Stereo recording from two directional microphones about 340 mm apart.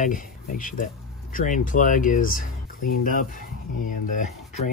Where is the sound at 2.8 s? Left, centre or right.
Left.